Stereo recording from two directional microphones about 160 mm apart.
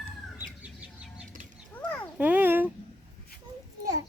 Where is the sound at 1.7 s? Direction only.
10° left (ahead or behind).